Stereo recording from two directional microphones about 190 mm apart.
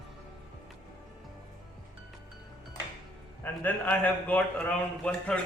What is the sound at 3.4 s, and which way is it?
A man's voice, 10° left (ahead or behind).